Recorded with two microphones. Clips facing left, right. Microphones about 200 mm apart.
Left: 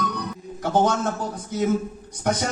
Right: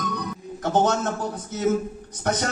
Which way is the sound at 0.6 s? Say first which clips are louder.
Even; 10° left (ahead or behind).